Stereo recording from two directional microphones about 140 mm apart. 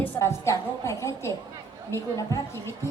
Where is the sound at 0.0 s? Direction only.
20° left (ahead or behind).